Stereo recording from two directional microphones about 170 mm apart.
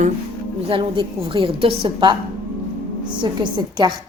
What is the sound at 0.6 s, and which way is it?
A woman's voice, 30° right (ahead or behind).